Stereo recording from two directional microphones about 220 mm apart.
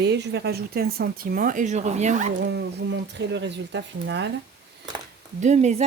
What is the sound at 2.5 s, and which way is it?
Speech, 55° right (ahead or behind).